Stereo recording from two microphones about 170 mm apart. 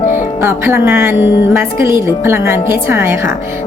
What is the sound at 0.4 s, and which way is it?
Speech, 15° right (ahead or behind).